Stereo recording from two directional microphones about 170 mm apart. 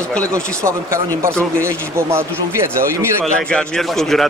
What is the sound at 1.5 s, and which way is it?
Speech, 15° right (ahead or behind).